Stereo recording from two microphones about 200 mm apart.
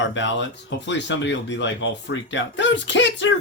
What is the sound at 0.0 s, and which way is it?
Speech, 65° left (ahead or behind).